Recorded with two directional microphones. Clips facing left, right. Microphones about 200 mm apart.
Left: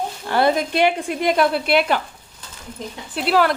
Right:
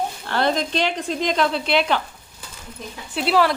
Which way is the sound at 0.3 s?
10° left (ahead or behind).